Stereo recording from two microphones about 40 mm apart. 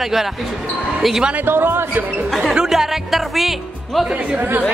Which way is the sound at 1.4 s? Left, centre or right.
Right.